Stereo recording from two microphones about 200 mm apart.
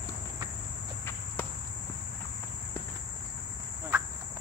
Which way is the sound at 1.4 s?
10° left (ahead or behind).